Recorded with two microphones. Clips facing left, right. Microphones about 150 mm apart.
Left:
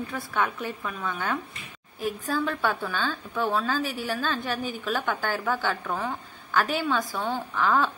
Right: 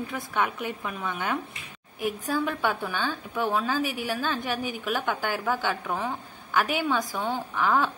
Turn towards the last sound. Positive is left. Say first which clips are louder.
# even
turn(degrees=-15)  # may be behind; listen again after turning